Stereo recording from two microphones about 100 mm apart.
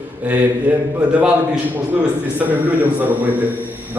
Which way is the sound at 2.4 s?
15° right (ahead or behind).